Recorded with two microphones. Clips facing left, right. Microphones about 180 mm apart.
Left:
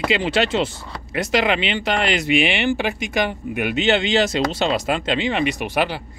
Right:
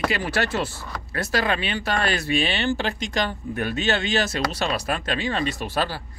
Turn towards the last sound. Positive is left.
turn(degrees=15)  # may be behind; listen again after turning